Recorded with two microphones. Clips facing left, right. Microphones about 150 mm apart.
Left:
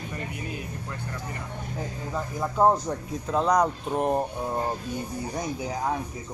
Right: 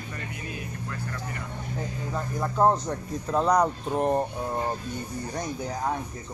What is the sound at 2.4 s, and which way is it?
Speech, 5° left (ahead or behind).